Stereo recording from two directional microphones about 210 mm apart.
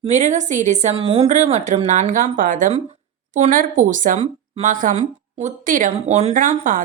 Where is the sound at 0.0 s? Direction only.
35° right (ahead or behind).